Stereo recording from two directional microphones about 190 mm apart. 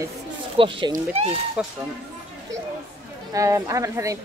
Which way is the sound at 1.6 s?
5° right (ahead or behind).